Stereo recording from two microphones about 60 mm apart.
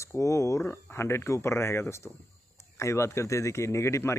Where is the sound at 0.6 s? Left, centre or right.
Left.